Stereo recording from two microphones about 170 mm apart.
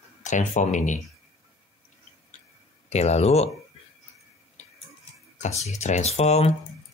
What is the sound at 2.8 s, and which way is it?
Speech, 40° left (ahead or behind).